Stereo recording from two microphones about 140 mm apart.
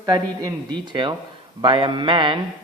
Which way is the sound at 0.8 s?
35° right (ahead or behind).